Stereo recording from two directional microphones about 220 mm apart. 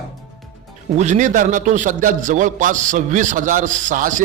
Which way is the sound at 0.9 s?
30° right (ahead or behind).